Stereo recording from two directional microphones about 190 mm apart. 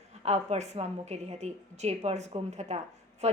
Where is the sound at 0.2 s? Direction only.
35° right (ahead or behind).